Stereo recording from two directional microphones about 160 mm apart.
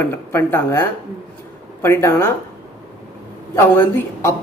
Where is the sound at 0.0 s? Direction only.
15° left (ahead or behind).